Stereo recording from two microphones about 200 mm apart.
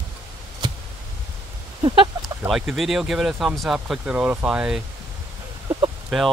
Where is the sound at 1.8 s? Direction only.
20° right (ahead or behind).